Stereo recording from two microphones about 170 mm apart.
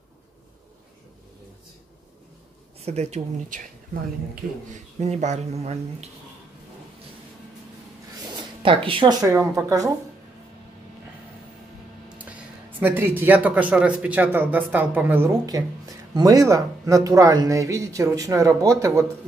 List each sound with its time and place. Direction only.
2.8 s speech: 40° right (ahead or behind)
4.7 s speech: 45° right (ahead or behind)
8.6 s speech: 30° right (ahead or behind)
12.8 s speech: 10° right (ahead or behind)